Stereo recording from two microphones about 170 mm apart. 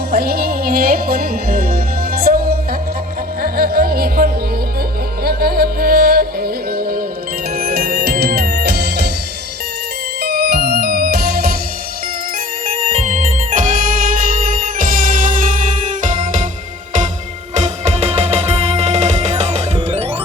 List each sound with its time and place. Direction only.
0.1 s music: 65° right (ahead or behind)
10.2 s music: 70° right (ahead or behind)
12.6 s music: 50° right (ahead or behind)
17.5 s music: 40° right (ahead or behind)